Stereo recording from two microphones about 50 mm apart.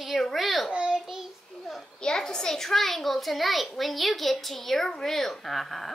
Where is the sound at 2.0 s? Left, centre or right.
Centre.